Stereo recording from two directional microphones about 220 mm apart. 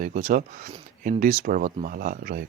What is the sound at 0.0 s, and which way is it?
Speech, 35° right (ahead or behind).